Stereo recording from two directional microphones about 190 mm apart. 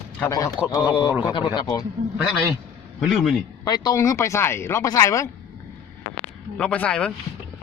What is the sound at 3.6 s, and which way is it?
Speech, 20° left (ahead or behind).